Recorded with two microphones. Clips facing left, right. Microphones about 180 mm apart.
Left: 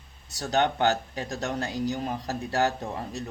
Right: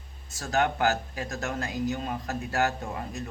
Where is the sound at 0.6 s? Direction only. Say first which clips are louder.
Left 2 dB; 30° left (ahead or behind).